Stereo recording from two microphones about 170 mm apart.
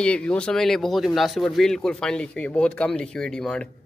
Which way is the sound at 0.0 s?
5° left (ahead or behind).